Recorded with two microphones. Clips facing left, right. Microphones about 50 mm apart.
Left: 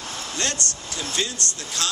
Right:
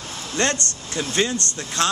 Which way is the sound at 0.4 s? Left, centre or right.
Right.